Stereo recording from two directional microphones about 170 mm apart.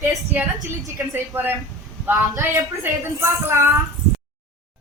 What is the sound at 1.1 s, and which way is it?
A woman's voice, 10° right (ahead or behind).